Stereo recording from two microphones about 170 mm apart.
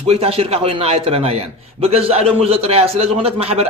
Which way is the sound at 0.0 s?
35° right (ahead or behind).